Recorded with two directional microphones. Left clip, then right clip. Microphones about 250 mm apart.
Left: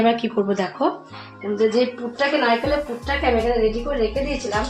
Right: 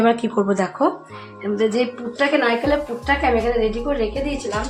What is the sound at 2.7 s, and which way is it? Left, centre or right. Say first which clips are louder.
A woman's voice: right 3 dB; centre.